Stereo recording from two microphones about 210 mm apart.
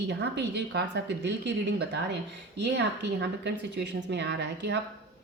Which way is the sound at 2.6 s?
55° right (ahead or behind).